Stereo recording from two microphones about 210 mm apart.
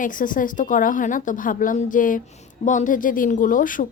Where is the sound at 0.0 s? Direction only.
40° left (ahead or behind).